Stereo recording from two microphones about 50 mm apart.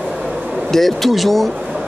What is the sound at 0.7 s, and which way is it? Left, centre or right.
Speech, centre.